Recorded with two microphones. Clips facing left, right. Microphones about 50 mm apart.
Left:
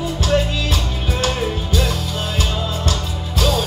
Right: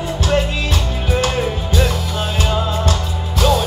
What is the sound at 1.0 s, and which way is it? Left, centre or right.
Music, right.